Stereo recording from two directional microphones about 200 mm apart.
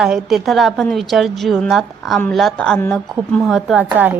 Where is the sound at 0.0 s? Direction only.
5° right (ahead or behind).